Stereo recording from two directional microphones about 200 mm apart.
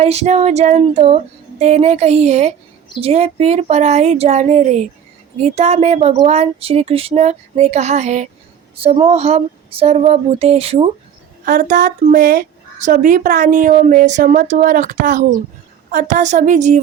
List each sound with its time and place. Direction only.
0.0 s a woman's voice: 30° right (ahead or behind)
11.4 s a woman's voice: 40° right (ahead or behind)